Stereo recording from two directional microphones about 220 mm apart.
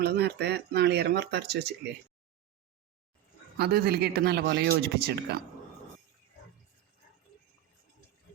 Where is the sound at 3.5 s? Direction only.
45° right (ahead or behind).